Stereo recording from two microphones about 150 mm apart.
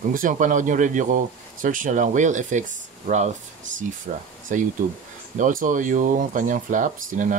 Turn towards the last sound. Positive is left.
turn(degrees=-60)  # may be behind; listen again after turning